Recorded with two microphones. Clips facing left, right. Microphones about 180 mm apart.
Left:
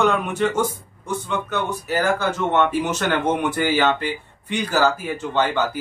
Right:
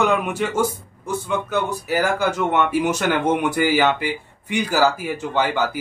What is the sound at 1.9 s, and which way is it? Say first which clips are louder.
A man's voice: right 1 dB; 10° right (ahead or behind).